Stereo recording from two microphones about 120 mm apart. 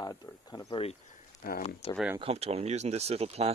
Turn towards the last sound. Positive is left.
turn(degrees=-60)  # may be behind; listen again after turning